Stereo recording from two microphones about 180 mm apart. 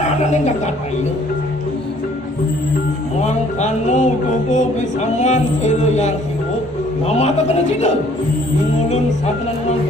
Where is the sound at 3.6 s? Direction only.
45° left (ahead or behind).